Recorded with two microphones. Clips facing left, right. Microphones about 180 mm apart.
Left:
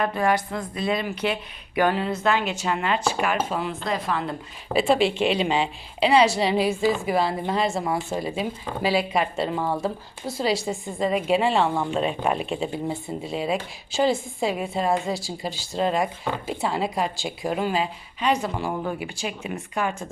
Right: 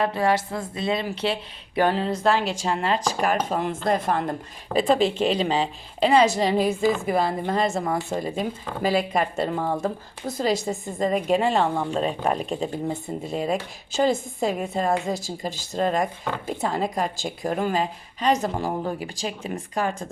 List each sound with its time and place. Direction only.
0.0 s a woman's voice: 25° right (ahead or behind); by 6.7 s 45° right (ahead or behind)
6.8 s a woman's voice: 10° left (ahead or behind)
7.1 s speech: 50° right (ahead or behind)
11.0 s a woman's voice: 45° right (ahead or behind)